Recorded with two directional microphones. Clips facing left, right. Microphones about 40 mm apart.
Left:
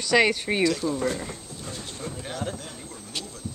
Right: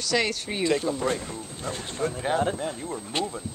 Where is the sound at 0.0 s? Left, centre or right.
Centre.